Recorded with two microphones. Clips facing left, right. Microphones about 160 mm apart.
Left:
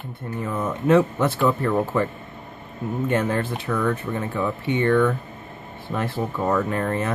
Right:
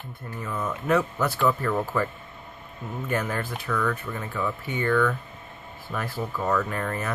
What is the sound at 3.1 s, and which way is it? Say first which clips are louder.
Speech: left 4 dB; 30° left (ahead or behind).